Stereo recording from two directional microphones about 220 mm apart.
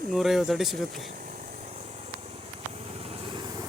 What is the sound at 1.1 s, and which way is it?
Vehicle, 35° right (ahead or behind).